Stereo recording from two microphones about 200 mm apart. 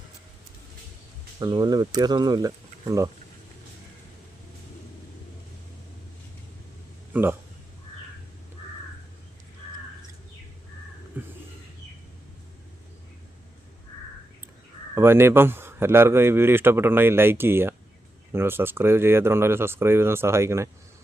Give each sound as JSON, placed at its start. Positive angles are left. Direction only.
{"t": 1.4, "sound": "speech", "side_deg": -20}
{"t": 7.1, "sound": "speech", "side_deg": -10}
{"t": 11.2, "sound": "a sound", "side_deg": -10}
{"t": 14.9, "sound": "a man's voice", "side_deg": -10}